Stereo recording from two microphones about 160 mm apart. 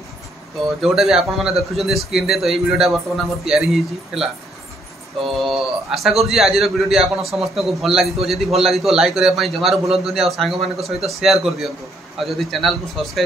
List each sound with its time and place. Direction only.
0.8 s a man's voice: centre (ahead or behind)